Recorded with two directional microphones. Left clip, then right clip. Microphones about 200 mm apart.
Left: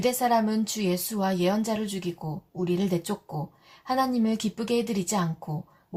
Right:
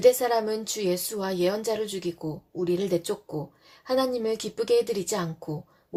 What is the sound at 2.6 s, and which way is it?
Speech, 40° right (ahead or behind).